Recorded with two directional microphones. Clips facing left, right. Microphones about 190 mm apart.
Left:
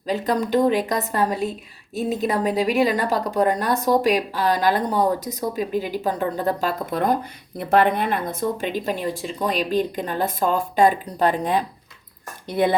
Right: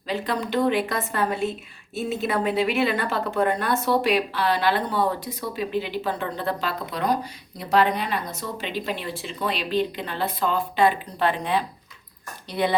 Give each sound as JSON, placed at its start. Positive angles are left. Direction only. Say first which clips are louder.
{"t": 0.1, "sound": "a woman's voice", "louder": "left 5 dB", "side_deg": 40}